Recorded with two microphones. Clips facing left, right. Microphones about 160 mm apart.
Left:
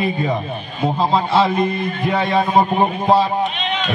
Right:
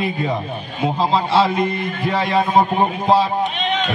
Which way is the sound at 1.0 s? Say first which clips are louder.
Even; 5° left (ahead or behind).